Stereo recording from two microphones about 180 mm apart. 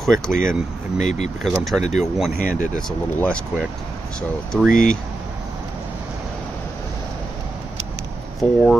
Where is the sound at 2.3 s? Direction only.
50° left (ahead or behind).